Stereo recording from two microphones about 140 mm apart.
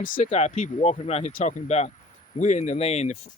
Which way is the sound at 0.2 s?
50° left (ahead or behind).